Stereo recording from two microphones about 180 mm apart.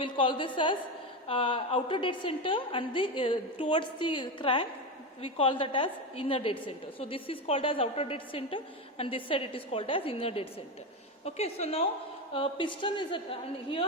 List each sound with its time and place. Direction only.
0.0 s a woman's voice: 25° left (ahead or behind)